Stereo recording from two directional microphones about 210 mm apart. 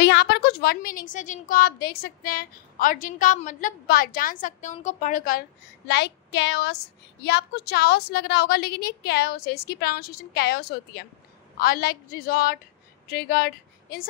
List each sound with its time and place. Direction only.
0.0 s a woman's voice: 50° left (ahead or behind)
5.9 s child singing: 55° left (ahead or behind)
7.2 s a woman's voice: 50° left (ahead or behind)